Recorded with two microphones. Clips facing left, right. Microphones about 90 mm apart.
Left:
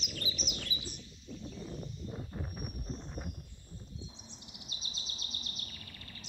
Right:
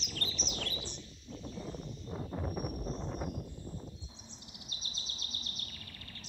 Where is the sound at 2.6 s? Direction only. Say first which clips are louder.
Right 6 dB; 90° right.